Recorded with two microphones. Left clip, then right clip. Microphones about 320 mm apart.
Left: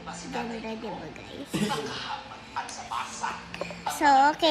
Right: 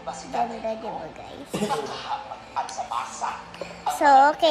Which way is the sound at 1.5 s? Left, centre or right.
Centre.